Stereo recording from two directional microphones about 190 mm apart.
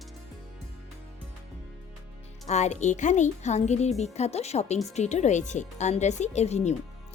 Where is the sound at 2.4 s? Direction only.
35° left (ahead or behind).